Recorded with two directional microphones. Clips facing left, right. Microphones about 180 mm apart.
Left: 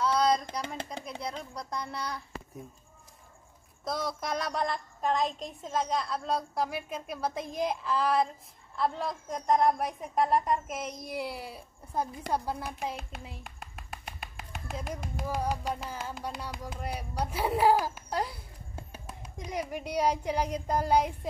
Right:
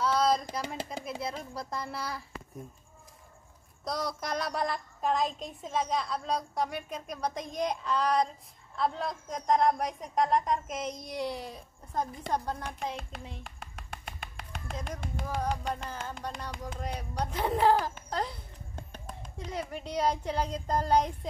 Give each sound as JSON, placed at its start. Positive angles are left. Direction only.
{"t": 0.0, "sound": "speech", "side_deg": 0}
{"t": 3.8, "sound": "a woman's voice", "side_deg": 0}